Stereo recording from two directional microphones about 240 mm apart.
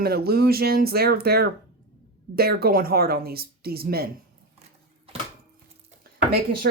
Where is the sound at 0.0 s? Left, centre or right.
Right.